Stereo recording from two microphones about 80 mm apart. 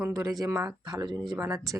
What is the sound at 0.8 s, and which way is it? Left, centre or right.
Speech, right.